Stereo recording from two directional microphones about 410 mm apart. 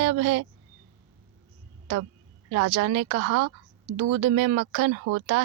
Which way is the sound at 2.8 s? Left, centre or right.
Right.